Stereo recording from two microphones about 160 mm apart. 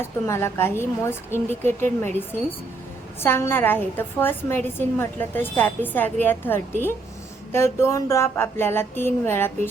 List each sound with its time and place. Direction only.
0.0 s a woman's voice: 15° left (ahead or behind)